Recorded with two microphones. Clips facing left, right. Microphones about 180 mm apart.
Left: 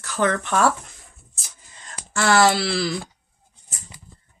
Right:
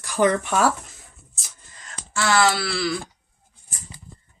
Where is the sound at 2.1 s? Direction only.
55° left (ahead or behind).